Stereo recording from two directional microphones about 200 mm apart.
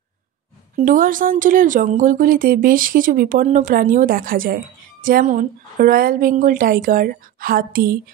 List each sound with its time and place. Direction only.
0.7 s speech: 40° right (ahead or behind)